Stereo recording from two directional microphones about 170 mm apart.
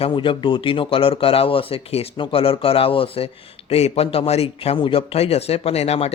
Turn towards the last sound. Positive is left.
turn(degrees=35)  # may be behind; listen again after turning